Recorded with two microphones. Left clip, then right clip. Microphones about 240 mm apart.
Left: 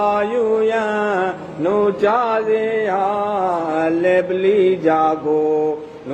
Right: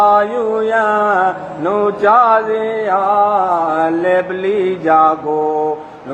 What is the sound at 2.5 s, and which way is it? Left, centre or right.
Mantra, centre.